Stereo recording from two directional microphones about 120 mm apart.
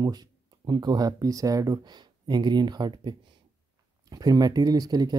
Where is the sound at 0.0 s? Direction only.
35° right (ahead or behind).